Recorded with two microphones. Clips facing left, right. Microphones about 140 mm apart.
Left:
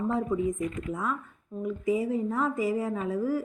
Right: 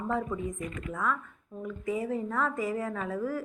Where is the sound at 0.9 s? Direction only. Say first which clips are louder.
Even; 15° left (ahead or behind).